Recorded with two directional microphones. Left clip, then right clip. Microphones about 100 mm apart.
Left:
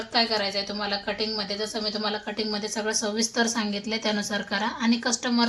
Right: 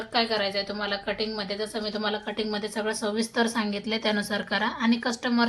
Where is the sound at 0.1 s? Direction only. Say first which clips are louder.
Left 1 dB; 20° right (ahead or behind).